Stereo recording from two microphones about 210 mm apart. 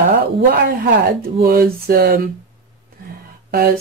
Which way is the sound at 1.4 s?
45° right (ahead or behind).